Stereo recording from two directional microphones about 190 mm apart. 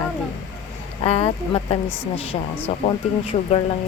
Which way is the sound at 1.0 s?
30° left (ahead or behind).